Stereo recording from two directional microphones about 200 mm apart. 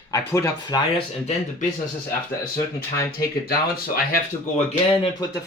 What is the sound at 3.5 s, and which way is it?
Speech, 45° left (ahead or behind).